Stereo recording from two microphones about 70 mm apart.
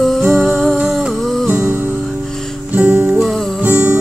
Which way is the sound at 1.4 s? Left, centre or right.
Centre.